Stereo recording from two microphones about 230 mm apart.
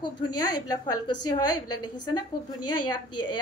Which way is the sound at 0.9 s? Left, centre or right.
Left.